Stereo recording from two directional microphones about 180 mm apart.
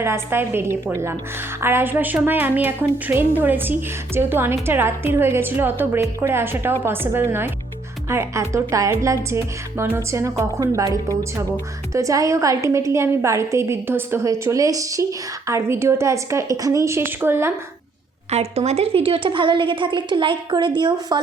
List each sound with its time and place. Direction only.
0.0 s a woman's voice: 15° right (ahead or behind)
18.3 s speech: 35° right (ahead or behind)